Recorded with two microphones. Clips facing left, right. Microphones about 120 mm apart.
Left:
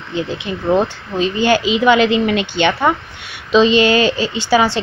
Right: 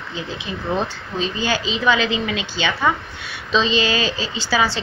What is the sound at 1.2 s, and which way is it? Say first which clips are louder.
Speech: left 8 dB; 65° left (ahead or behind).